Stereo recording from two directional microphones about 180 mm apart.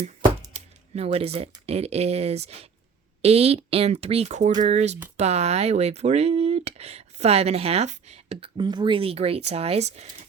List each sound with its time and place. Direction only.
0.5 s speech: 35° right (ahead or behind)